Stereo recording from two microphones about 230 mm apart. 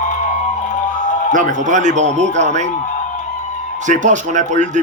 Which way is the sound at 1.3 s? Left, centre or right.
Right.